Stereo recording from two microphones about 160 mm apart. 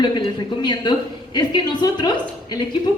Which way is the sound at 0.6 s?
30° left (ahead or behind).